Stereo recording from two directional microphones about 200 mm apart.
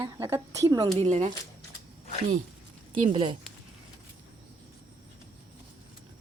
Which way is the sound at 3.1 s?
25° right (ahead or behind).